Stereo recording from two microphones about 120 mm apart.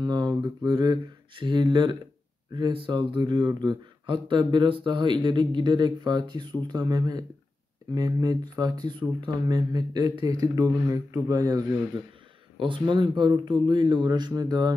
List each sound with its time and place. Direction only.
0.0 s speech: 35° right (ahead or behind)
12.5 s speech: 45° right (ahead or behind)